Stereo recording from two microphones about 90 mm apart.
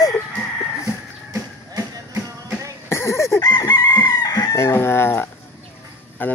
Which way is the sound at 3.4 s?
50° left (ahead or behind).